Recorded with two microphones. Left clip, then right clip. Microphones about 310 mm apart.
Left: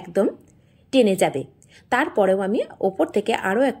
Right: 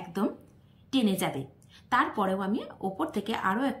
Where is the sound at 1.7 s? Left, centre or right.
Centre.